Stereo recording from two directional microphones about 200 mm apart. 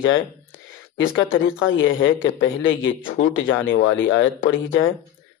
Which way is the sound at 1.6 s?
70° left (ahead or behind).